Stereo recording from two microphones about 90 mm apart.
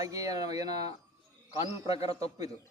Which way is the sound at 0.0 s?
40° right (ahead or behind).